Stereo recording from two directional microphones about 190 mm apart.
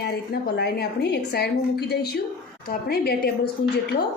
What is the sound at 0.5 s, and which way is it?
A woman's voice, 60° left (ahead or behind).